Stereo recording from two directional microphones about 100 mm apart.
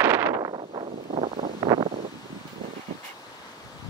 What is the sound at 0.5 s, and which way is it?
Vehicle, 65° right (ahead or behind).